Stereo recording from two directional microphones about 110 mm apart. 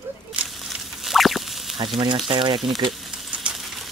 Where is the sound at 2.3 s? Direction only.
50° right (ahead or behind).